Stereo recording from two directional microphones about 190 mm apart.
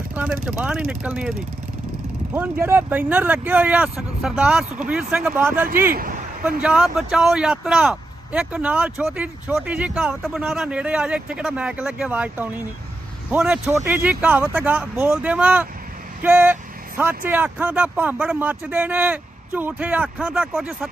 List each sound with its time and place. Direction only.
0.1 s speech: 5° right (ahead or behind)
2.3 s speech: 10° right (ahead or behind)
5.9 s speech: 50° right (ahead or behind)
6.6 s speech: 5° right (ahead or behind)